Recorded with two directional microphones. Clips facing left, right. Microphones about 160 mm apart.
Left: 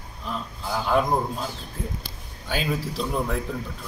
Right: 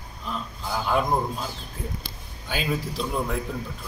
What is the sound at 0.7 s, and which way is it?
Speech, centre (ahead or behind).